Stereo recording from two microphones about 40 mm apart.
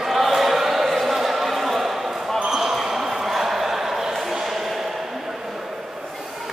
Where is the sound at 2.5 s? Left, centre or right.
Centre.